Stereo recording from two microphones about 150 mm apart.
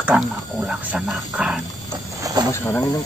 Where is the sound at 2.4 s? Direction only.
30° right (ahead or behind).